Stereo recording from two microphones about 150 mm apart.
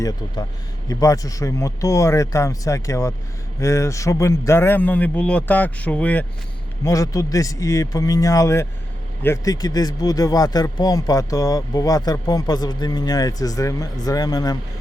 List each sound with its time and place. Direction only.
0.9 s a man's voice: 25° left (ahead or behind)
6.8 s speech: 25° left (ahead or behind)